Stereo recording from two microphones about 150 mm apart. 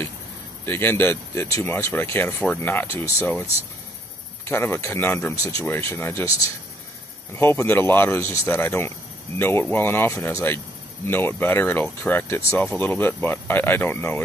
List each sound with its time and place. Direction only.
0.7 s speech: 15° left (ahead or behind)
4.5 s speech: 15° left (ahead or behind)